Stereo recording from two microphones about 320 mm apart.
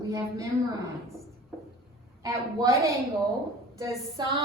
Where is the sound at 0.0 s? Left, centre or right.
Centre.